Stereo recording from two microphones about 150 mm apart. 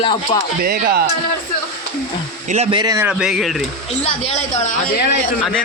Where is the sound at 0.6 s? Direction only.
90° right.